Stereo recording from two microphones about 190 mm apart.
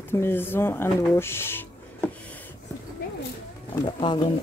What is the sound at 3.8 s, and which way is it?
Speech, 25° left (ahead or behind).